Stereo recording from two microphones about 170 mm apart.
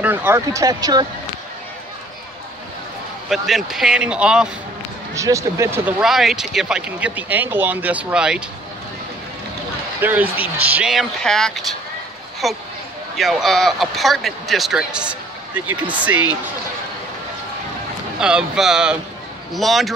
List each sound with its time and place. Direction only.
0.0 s speech: 10° right (ahead or behind)
3.3 s speech: centre (ahead or behind)
5.1 s speech: 20° right (ahead or behind)
5.9 s speech: 5° right (ahead or behind)
10.0 s speech: 10° right (ahead or behind)
18.2 s speech: 5° right (ahead or behind)